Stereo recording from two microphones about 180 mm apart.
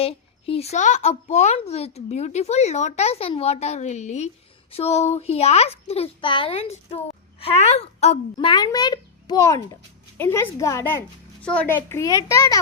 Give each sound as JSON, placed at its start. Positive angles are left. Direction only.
{"t": 0.0, "sound": "a child's voice", "side_deg": 35}